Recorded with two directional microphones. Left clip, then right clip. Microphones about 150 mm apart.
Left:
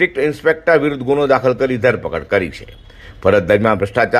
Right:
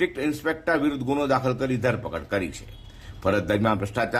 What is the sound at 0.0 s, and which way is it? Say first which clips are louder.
A man's voice: left 11 dB; 25° left (ahead or behind).